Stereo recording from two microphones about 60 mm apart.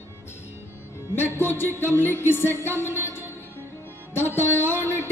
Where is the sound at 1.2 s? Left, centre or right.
Left.